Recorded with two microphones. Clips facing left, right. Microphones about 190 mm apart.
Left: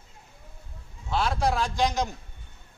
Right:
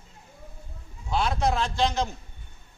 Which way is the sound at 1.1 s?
5° left (ahead or behind).